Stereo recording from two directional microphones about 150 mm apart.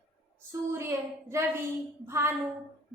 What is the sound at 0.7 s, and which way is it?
A woman's voice, 20° right (ahead or behind).